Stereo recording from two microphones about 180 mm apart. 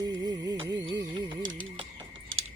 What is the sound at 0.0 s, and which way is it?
Music, 20° right (ahead or behind).